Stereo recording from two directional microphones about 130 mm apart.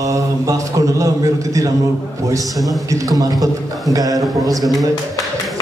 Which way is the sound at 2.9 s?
25° right (ahead or behind).